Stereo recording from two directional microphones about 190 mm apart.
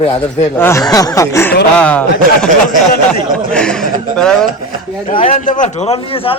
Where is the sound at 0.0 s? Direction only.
35° left (ahead or behind).